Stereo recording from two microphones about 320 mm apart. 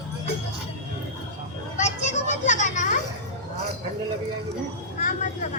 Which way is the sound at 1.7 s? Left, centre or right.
Left.